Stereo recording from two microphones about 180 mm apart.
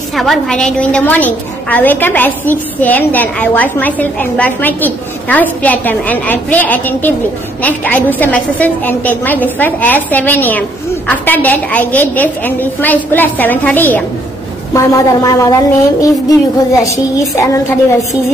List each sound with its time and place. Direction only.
0.1 s a woman's voice: centre (ahead or behind); by 17.5 s 15° left (ahead or behind)